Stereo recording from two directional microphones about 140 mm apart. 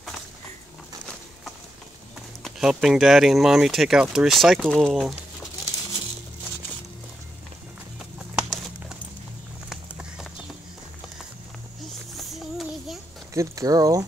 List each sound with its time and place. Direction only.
2.4 s speech: 5° right (ahead or behind)
8.4 s a sound: centre (ahead or behind)
12.2 s child singing: centre (ahead or behind)
13.3 s speech: 25° right (ahead or behind)